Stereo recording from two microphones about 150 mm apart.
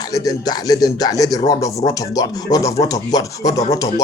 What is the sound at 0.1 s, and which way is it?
Speech, 25° left (ahead or behind).